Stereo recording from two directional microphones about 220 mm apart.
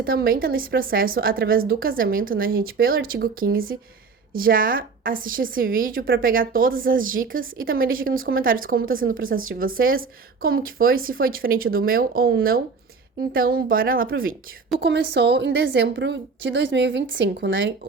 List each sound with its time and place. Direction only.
0.0 s a woman's voice: 45° right (ahead or behind)